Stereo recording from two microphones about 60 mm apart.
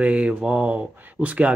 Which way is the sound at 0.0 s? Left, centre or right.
Right.